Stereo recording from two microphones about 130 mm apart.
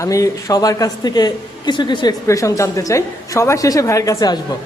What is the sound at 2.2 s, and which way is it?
A woman's voice, 25° left (ahead or behind).